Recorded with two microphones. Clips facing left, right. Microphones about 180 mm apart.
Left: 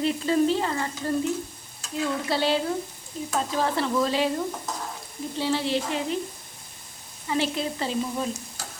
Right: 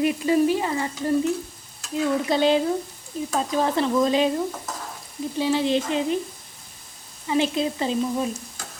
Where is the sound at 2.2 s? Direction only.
20° right (ahead or behind).